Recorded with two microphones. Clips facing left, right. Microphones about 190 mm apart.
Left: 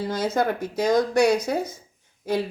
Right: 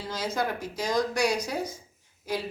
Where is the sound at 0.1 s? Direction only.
55° left (ahead or behind).